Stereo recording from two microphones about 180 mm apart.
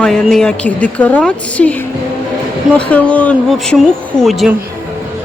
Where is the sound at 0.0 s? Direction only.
5° left (ahead or behind).